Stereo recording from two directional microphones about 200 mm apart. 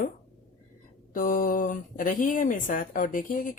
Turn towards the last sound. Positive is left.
turn(degrees=45)  # may be behind; listen again after turning